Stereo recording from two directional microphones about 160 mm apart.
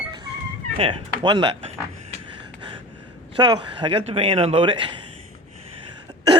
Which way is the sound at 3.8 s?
35° right (ahead or behind).